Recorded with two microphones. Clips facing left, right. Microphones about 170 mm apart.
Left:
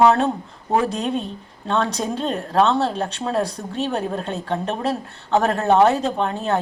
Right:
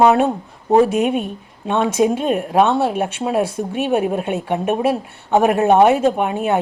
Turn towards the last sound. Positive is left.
turn(degrees=-15)  # may be behind; listen again after turning